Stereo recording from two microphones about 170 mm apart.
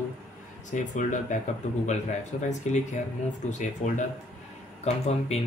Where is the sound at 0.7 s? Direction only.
45° left (ahead or behind).